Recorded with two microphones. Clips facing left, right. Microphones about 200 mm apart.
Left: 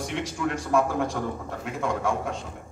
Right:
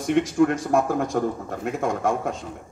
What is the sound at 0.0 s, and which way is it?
A man's voice, 50° right (ahead or behind).